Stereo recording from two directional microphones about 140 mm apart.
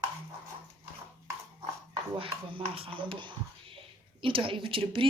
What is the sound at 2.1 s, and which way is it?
A woman's voice, 40° right (ahead or behind).